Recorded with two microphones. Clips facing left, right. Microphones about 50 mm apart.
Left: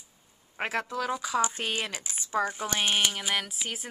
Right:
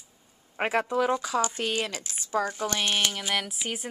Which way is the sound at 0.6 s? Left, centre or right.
Centre.